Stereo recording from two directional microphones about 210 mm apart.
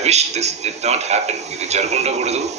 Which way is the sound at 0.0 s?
30° right (ahead or behind).